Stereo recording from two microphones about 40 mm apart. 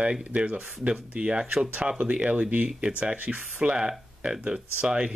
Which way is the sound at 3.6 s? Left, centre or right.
Centre.